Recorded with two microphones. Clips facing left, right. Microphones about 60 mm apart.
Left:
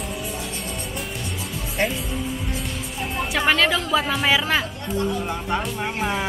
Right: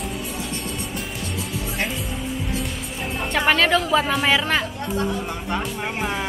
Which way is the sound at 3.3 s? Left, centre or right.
Centre.